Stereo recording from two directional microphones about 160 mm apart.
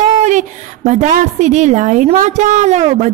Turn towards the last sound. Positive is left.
turn(degrees=-45)  # may be behind; listen again after turning